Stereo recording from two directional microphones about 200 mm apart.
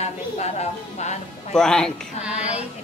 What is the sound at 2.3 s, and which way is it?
Speech, 35° left (ahead or behind).